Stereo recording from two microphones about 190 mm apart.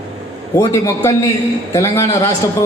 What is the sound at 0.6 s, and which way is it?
A man's voice, 15° left (ahead or behind).